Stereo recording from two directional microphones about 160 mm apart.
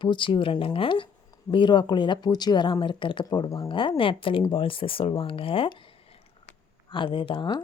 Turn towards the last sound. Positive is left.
turn(degrees=30)  # may be behind; listen again after turning